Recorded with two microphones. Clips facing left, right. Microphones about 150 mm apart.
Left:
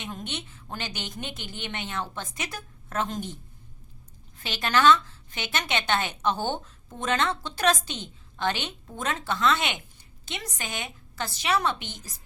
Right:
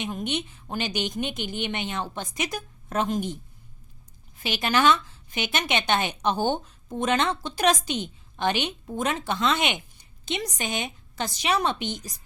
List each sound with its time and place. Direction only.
0.0 s a woman's voice: 15° right (ahead or behind)
4.4 s a woman's voice: 15° right (ahead or behind)